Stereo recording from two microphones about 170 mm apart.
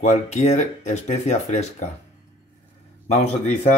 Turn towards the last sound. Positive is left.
turn(degrees=40)  # may be behind; listen again after turning